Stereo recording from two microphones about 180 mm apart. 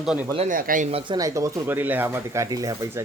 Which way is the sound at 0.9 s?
25° right (ahead or behind).